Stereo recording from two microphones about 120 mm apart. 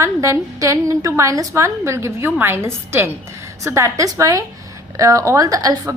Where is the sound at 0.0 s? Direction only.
25° right (ahead or behind).